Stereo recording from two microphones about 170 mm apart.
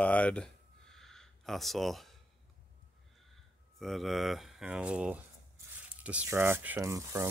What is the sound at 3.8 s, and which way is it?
Speech, centre (ahead or behind).